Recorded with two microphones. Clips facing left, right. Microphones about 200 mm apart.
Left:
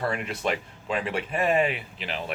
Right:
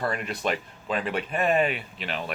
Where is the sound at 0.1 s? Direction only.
15° left (ahead or behind).